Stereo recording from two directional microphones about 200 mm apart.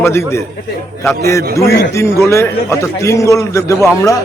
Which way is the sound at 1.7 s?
55° left (ahead or behind).